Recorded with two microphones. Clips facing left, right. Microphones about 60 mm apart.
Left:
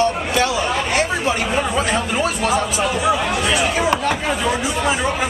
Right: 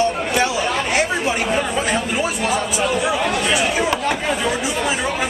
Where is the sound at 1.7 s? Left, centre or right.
Centre.